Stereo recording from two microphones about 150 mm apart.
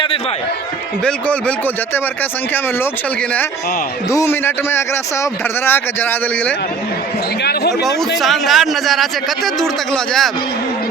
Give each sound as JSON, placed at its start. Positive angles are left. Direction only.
{"t": 1.0, "sound": "speech", "side_deg": 10}
{"t": 4.1, "sound": "speech", "side_deg": 15}
{"t": 7.8, "sound": "a man's voice", "side_deg": 0}